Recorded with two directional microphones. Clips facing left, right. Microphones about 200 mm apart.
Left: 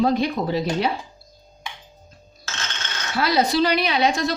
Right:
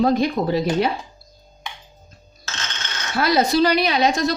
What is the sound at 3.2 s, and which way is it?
A woman's voice, 45° right (ahead or behind).